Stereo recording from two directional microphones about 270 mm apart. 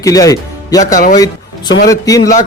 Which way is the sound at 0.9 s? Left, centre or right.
Left.